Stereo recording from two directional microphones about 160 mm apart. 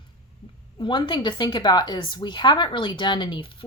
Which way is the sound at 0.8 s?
30° left (ahead or behind).